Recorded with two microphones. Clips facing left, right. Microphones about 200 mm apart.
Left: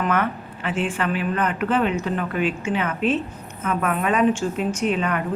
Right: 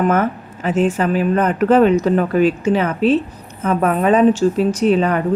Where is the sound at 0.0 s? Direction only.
45° right (ahead or behind).